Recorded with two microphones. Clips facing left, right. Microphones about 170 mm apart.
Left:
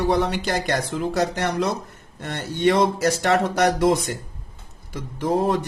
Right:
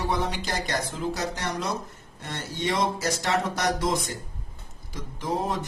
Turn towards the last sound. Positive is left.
turn(degrees=55)  # may be behind; listen again after turning